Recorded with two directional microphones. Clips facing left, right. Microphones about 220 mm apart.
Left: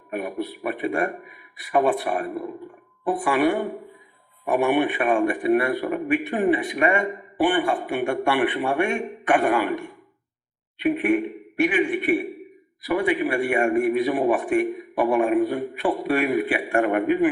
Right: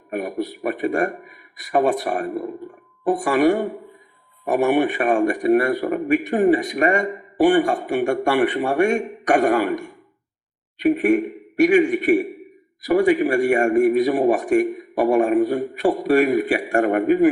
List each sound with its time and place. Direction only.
0.1 s a man's voice: 40° right (ahead or behind)